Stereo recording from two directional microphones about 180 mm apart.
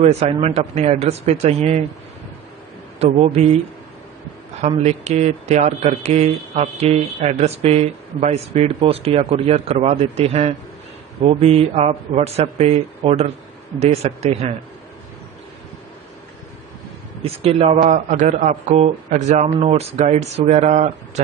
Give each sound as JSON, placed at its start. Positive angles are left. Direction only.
{"t": 0.0, "sound": "speech", "side_deg": -35}
{"t": 3.0, "sound": "speech", "side_deg": -35}
{"t": 4.6, "sound": "speech", "side_deg": -35}
{"t": 17.2, "sound": "speech", "side_deg": -35}